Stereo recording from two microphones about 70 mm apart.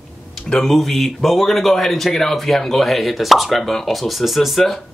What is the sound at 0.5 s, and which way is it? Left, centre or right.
Speech, centre.